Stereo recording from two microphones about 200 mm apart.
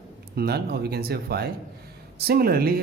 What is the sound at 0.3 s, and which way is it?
A woman's voice, 50° right (ahead or behind).